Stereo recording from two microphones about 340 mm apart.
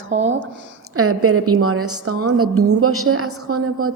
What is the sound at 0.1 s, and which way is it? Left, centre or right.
A woman's voice, right.